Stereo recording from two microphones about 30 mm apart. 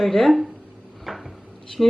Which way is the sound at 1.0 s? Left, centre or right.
Centre.